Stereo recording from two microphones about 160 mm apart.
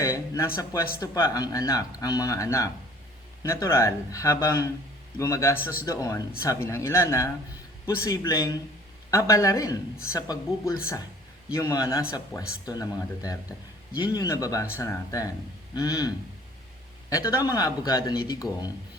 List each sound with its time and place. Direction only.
0.0 s speech: 20° left (ahead or behind)
18.4 s speech: centre (ahead or behind)